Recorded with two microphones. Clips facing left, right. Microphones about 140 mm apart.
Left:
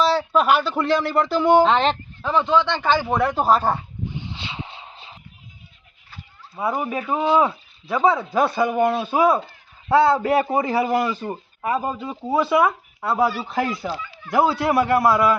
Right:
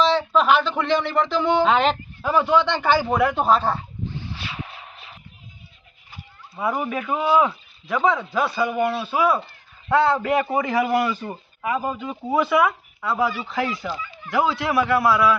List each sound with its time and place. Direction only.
0.0 s a man's voice: 40° left (ahead or behind)
0.6 s speech: 5° left (ahead or behind)
3.7 s a sound: 15° left (ahead or behind)
6.6 s speech: 25° left (ahead or behind); by 15.4 s 45° left (ahead or behind)